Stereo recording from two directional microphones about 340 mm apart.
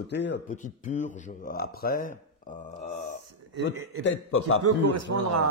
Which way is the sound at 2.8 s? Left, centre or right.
Centre.